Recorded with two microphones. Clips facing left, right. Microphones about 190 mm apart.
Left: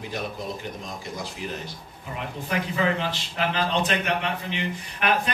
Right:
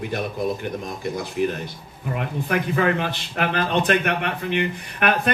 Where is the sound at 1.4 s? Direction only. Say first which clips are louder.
Right 10 dB; 55° right (ahead or behind).